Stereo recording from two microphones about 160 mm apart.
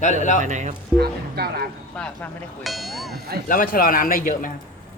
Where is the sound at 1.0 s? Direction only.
80° right.